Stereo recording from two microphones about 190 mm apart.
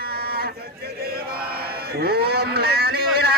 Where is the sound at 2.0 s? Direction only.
55° right (ahead or behind).